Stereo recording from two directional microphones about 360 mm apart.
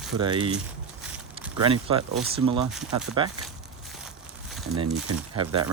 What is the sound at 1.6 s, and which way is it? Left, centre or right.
Speech, centre.